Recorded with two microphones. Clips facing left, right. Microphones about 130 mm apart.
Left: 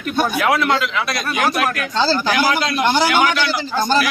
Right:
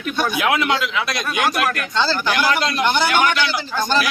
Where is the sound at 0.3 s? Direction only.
5° right (ahead or behind).